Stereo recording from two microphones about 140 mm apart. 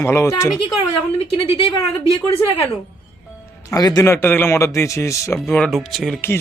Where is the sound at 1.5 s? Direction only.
40° left (ahead or behind).